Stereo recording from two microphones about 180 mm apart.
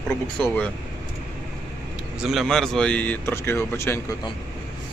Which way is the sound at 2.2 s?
Centre (ahead or behind).